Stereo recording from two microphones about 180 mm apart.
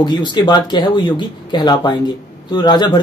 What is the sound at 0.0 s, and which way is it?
Speech, 25° left (ahead or behind).